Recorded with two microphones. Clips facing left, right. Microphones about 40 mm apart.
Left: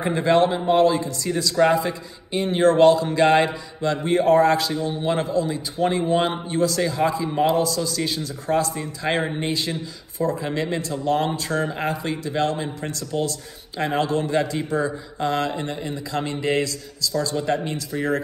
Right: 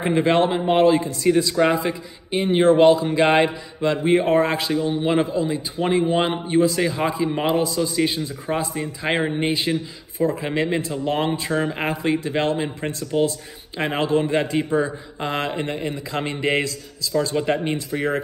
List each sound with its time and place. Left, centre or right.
0.0 s a man's voice: right